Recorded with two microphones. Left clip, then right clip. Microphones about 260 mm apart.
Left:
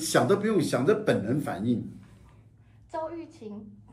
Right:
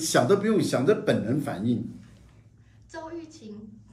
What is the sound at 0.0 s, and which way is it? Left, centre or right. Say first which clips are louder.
Speech: right 2 dB; centre.